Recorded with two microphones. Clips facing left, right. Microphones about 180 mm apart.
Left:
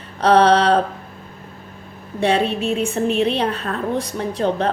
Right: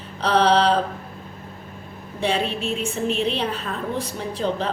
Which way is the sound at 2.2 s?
65° left (ahead or behind).